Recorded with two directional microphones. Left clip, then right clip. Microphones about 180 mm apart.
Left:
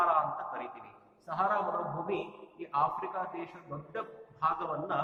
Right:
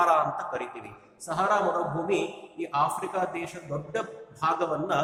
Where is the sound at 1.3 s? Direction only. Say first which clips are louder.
Right 6 dB; 50° right (ahead or behind).